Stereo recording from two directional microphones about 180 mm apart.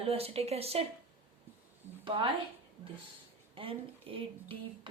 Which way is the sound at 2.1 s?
30° right (ahead or behind).